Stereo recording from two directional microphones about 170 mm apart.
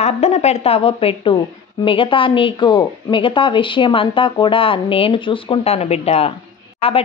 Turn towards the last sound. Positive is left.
turn(degrees=35)  # may be behind; listen again after turning